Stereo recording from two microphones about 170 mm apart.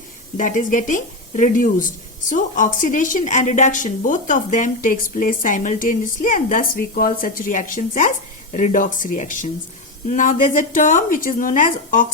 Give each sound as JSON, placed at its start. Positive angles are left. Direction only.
{"t": 0.3, "sound": "a woman's voice", "side_deg": 50}